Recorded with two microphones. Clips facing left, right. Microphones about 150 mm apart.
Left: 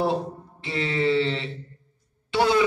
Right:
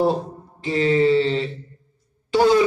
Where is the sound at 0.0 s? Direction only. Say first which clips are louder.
Right 4 dB; 40° right (ahead or behind).